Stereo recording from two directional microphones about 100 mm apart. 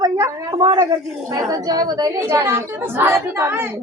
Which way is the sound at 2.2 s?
25° right (ahead or behind).